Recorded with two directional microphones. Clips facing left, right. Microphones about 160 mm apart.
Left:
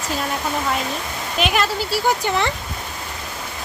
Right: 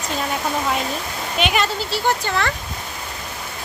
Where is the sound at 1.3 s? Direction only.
Centre (ahead or behind).